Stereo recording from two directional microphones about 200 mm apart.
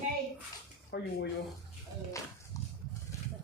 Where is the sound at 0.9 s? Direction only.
55° left (ahead or behind).